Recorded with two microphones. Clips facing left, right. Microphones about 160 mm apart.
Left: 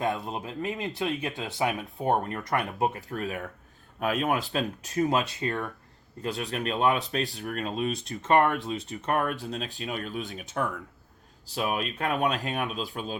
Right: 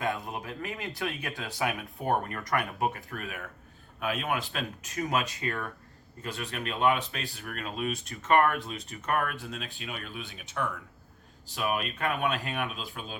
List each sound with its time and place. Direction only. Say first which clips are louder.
0.0 s speech: left 3 dB; 20° left (ahead or behind)
6.2 s speech: left 5 dB; 40° left (ahead or behind)